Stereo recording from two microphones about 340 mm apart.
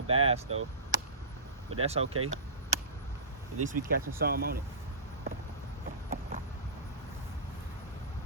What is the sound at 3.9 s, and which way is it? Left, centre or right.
Speech, right.